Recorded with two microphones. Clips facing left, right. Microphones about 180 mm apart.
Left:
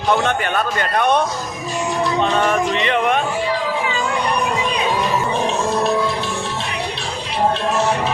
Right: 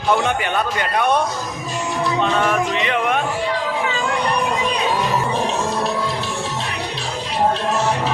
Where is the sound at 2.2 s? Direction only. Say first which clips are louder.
Left 1 dB; centre (ahead or behind).